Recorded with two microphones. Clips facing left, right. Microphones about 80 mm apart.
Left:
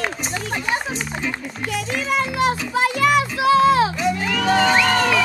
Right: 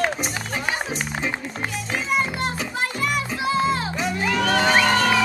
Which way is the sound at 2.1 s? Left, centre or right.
Left.